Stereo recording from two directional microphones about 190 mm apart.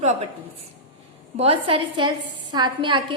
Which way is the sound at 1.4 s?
30° right (ahead or behind).